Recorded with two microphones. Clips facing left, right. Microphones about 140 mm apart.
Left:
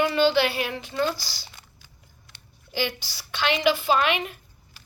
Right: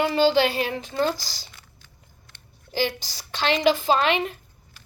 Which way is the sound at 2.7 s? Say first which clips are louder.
Right 3 dB; 40° right (ahead or behind).